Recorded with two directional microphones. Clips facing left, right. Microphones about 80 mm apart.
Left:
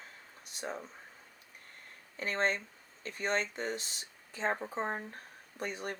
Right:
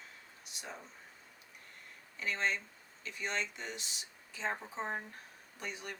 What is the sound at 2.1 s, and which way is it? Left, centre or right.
Speech, left.